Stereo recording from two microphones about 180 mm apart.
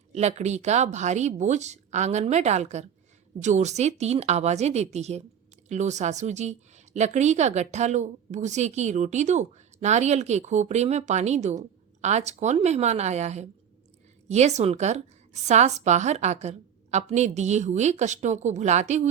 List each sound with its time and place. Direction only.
0.1 s speech: 40° right (ahead or behind)